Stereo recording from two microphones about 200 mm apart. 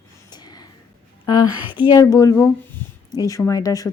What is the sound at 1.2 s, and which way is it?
A woman's voice, 20° left (ahead or behind).